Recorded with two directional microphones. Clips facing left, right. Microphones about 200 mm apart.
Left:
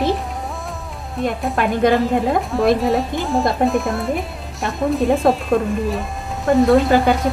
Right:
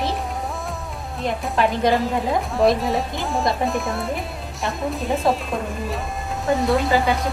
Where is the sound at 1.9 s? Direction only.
Centre (ahead or behind).